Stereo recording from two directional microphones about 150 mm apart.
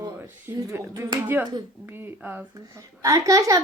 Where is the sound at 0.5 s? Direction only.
20° right (ahead or behind).